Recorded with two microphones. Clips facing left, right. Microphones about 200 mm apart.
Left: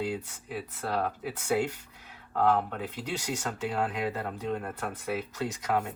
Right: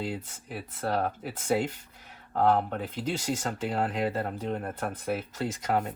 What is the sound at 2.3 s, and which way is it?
Speech, 35° right (ahead or behind).